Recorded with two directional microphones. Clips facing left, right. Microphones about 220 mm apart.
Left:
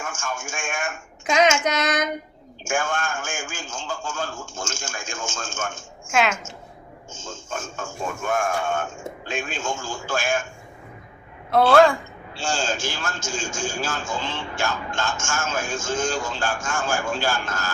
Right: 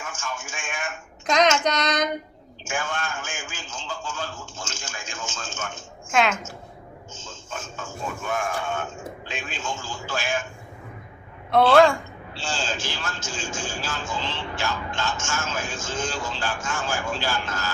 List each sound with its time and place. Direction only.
0.0 s speech: 45° left (ahead or behind)
1.3 s child singing: 10° left (ahead or behind)
2.6 s speech: 45° left (ahead or behind)
6.1 s a woman's voice: centre (ahead or behind)
7.1 s speech: 45° left (ahead or behind)
11.5 s a woman's voice: centre (ahead or behind)
12.3 s speech: 45° left (ahead or behind)